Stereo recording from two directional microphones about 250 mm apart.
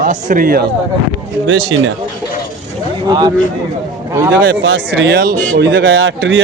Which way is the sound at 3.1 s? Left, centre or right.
Centre.